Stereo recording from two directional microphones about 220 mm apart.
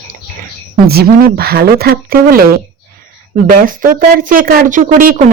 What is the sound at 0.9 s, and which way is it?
Speech, 45° right (ahead or behind).